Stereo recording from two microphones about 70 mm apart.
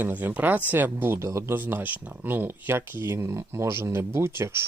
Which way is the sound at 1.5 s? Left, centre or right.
Right.